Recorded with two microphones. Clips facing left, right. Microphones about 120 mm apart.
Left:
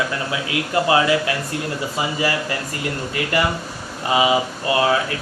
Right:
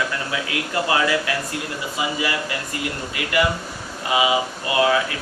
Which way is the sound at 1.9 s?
35° left (ahead or behind).